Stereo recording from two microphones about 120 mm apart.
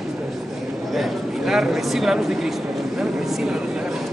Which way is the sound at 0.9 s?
Centre (ahead or behind).